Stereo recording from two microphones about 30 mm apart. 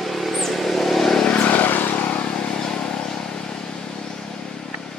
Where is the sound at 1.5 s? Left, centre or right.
Left.